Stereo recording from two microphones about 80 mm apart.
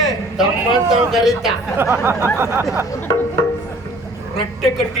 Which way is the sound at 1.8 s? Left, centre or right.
Right.